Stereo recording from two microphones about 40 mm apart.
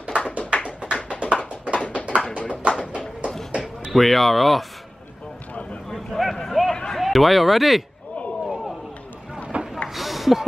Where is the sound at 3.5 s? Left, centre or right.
Centre.